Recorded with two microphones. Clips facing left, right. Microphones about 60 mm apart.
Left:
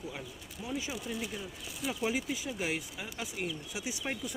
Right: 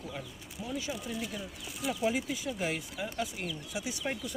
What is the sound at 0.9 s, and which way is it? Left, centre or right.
Speech, centre.